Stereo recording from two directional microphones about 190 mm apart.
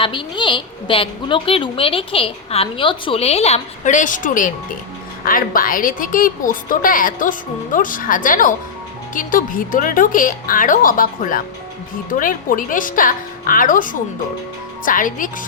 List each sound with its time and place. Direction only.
0.0 s a woman's voice: 25° left (ahead or behind); by 15.4 s 45° left (ahead or behind)